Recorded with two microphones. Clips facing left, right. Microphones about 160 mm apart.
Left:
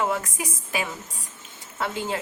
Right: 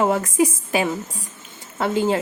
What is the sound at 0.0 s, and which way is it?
A woman's voice, 30° right (ahead or behind).